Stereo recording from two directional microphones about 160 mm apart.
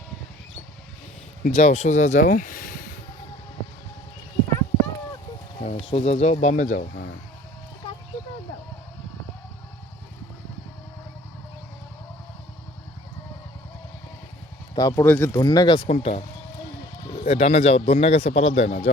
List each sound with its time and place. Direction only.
1.5 s speech: 45° left (ahead or behind)
5.5 s speech: 40° left (ahead or behind)
6.7 s speech: 75° left (ahead or behind)
14.8 s speech: 25° left (ahead or behind)
15.0 s speech: 15° left (ahead or behind)
15.4 s speech: 25° left (ahead or behind)
15.9 s speech: 40° left (ahead or behind)
17.2 s a man's voice: 45° left (ahead or behind)